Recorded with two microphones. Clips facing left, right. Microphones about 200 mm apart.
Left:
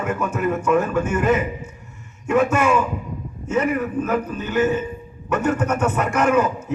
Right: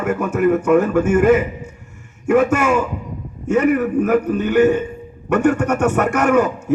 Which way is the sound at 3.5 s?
65° right (ahead or behind).